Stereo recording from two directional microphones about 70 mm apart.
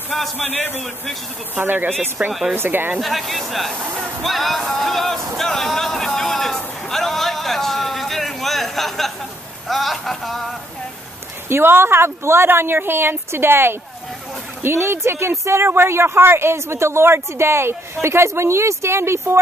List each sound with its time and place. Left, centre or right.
0.4 s a man's voice: left
1.5 s speech: right
2.2 s speech: centre
2.5 s speech: right
3.0 s speech: centre
4.2 s a sound: centre
11.4 s speech: right